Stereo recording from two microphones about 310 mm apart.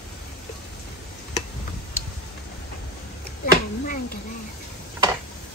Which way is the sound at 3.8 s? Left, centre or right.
Left.